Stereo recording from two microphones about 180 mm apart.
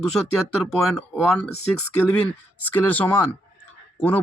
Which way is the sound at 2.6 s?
10° left (ahead or behind).